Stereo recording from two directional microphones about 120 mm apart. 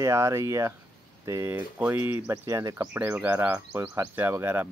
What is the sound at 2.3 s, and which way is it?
Speech, 25° right (ahead or behind).